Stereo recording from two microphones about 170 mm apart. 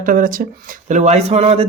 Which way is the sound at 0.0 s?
55° right (ahead or behind).